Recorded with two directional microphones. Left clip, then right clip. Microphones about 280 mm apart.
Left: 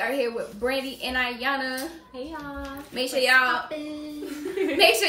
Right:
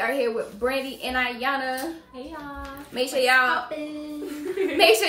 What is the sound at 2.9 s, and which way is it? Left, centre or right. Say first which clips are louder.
Speech: even; centre.